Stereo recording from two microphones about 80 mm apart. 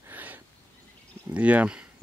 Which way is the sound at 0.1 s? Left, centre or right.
Right.